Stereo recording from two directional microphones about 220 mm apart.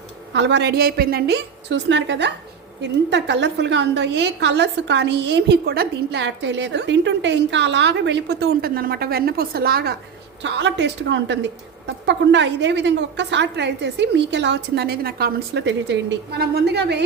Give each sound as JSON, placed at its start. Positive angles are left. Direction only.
{"t": 0.3, "sound": "a woman's voice", "side_deg": -55}